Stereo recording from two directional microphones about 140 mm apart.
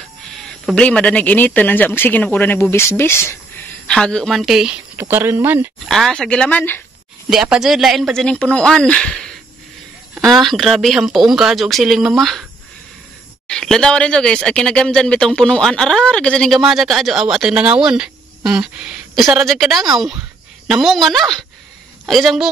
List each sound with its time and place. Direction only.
0.7 s speech: 10° left (ahead or behind)
3.8 s speech: 5° left (ahead or behind)
4.9 s speech: 15° right (ahead or behind)
5.9 s speech: centre (ahead or behind)
7.2 s speech: 5° right (ahead or behind)
13.5 s speech: 5° left (ahead or behind)